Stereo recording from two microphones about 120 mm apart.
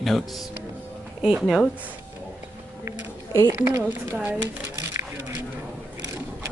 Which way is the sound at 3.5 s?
20° right (ahead or behind).